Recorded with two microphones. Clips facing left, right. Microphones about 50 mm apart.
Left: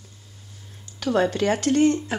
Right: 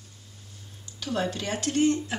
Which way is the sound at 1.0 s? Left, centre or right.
Left.